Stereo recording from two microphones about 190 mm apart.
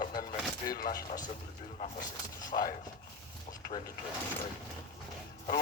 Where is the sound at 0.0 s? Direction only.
45° left (ahead or behind).